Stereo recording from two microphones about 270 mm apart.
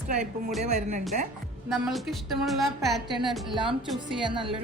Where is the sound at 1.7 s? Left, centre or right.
Centre.